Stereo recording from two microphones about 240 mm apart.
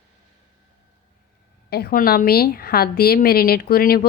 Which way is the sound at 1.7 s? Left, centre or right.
Left.